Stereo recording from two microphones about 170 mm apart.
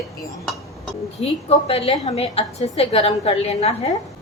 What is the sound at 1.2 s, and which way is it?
A woman's voice, 35° left (ahead or behind).